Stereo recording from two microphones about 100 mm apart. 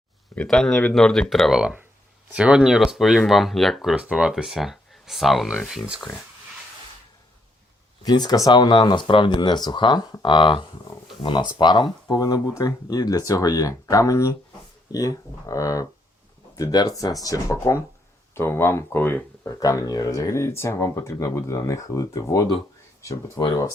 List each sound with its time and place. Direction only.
0.4 s speech: 5° left (ahead or behind)
8.0 s speech: 45° left (ahead or behind); by 19.2 s 20° left (ahead or behind)
19.5 s speech: 35° left (ahead or behind)
23.4 s speech: 40° left (ahead or behind)